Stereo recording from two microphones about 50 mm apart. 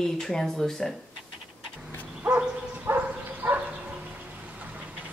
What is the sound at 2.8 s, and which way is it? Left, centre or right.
Bow-wow, right.